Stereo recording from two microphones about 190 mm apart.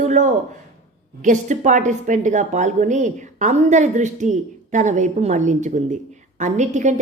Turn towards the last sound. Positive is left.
turn(degrees=-40)  # may be behind; listen again after turning